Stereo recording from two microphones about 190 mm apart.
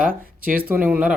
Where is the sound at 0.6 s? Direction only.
10° right (ahead or behind).